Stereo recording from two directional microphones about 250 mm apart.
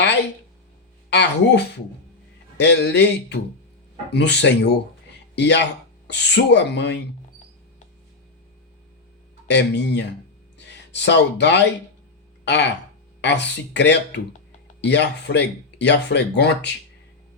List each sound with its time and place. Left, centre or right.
1.1 s speech: left
9.5 s speech: left